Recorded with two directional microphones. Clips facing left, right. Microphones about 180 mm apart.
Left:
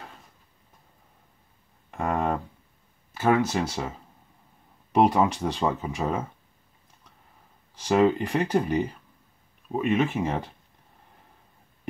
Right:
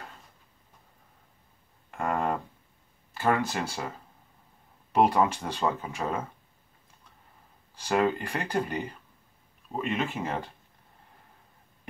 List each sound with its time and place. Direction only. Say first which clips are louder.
2.0 s a sound: left 2 dB; 15° left (ahead or behind)
3.4 s speech: left 5 dB; 15° left (ahead or behind)
4.9 s speech: left 2 dB; 15° left (ahead or behind)
7.8 s speech: left 5 dB; 15° left (ahead or behind)